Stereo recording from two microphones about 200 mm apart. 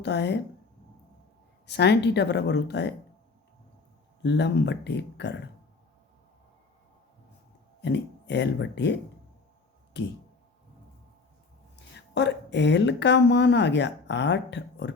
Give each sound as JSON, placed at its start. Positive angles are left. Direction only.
{"t": 0.0, "sound": "speech", "side_deg": 60}
{"t": 1.6, "sound": "speech", "side_deg": 55}
{"t": 4.2, "sound": "speech", "side_deg": 60}
{"t": 7.8, "sound": "speech", "side_deg": 60}
{"t": 11.9, "sound": "a woman's voice", "side_deg": 60}